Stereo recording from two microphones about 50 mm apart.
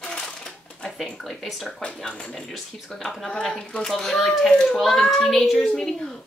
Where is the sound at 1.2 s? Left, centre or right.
Centre.